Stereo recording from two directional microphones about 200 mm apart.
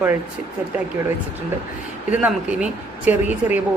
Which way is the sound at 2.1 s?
5° right (ahead or behind).